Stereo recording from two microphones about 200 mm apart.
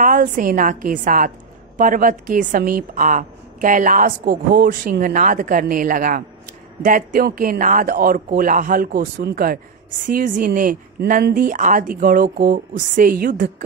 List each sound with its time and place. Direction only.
0.0 s a woman's voice: 40° right (ahead or behind)